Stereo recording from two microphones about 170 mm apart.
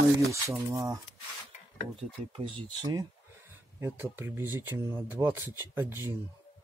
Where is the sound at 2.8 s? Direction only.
20° right (ahead or behind).